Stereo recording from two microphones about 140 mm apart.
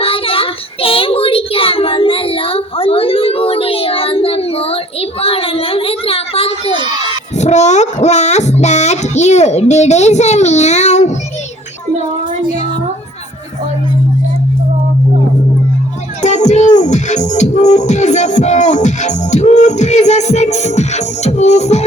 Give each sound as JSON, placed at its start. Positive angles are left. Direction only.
{"t": 0.0, "sound": "child singing", "side_deg": 40}
{"t": 7.3, "sound": "speech", "side_deg": 55}
{"t": 16.2, "sound": "music", "side_deg": 55}